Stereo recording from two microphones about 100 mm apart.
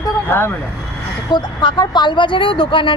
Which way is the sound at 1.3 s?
50° left (ahead or behind).